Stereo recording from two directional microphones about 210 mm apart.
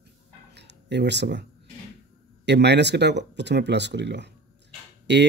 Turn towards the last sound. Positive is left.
turn(degrees=-55)  # may be behind; listen again after turning